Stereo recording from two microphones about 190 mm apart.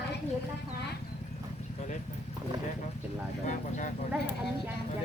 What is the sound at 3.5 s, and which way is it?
Speech, 40° left (ahead or behind).